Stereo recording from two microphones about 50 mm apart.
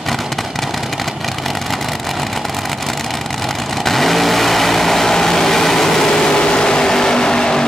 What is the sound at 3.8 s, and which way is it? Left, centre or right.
Vehicle, centre.